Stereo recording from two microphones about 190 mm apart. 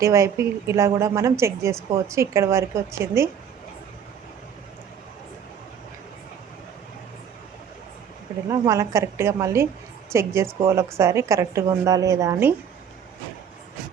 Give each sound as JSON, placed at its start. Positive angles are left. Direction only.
{"t": 0.0, "sound": "a woman's voice", "side_deg": -15}
{"t": 8.4, "sound": "a woman's voice", "side_deg": -15}